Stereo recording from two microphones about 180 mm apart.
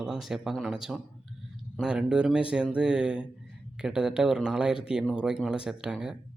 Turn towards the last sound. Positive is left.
turn(degrees=-5)  # may be behind; listen again after turning